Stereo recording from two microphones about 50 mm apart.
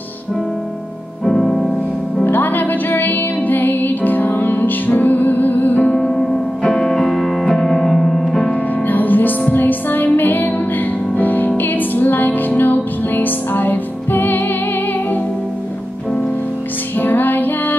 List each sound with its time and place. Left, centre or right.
1.2 s music: centre
2.2 s music: left
5.9 s music: centre
7.4 s piano: centre
8.8 s music: left
17.0 s music: left